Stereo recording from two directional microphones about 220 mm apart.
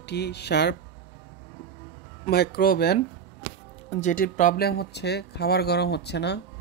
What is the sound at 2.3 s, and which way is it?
Speech, 45° left (ahead or behind).